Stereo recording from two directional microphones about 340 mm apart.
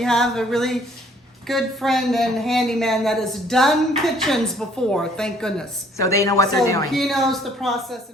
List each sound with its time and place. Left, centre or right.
0.0 s a woman's voice: centre